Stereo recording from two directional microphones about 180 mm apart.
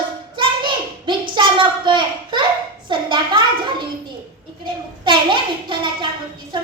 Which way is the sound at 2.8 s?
25° right (ahead or behind).